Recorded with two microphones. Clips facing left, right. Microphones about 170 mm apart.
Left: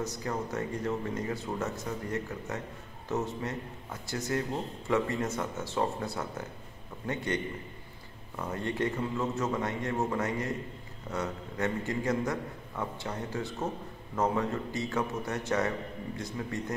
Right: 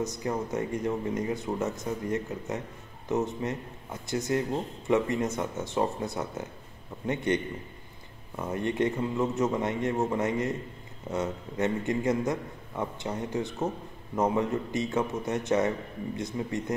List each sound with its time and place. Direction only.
0.0 s speech: 20° right (ahead or behind)
8.4 s speech: 20° right (ahead or behind)